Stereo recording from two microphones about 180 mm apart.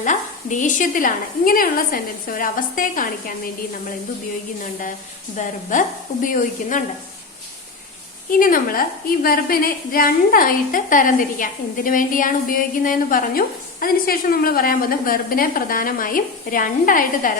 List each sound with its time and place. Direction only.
0.0 s a woman's voice: 45° left (ahead or behind)
5.4 s a woman's voice: 45° left (ahead or behind)
8.3 s a woman's voice: 50° left (ahead or behind)